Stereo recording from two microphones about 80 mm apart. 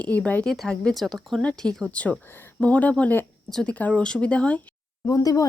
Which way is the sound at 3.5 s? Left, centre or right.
Centre.